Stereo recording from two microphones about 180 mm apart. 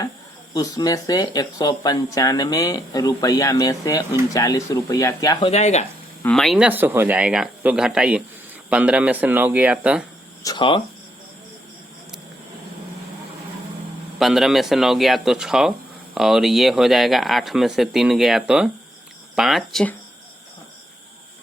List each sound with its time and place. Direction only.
0.5 s speech: 20° left (ahead or behind)
5.5 s speech: 40° left (ahead or behind)
6.2 s speech: centre (ahead or behind)
10.4 s speech: 25° left (ahead or behind)
14.2 s speech: centre (ahead or behind)